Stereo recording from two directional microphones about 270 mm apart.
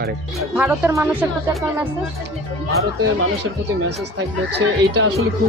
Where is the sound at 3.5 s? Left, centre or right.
Right.